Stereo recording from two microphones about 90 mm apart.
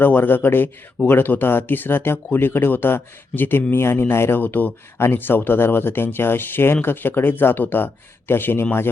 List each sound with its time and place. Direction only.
0.0 s speech: 20° left (ahead or behind)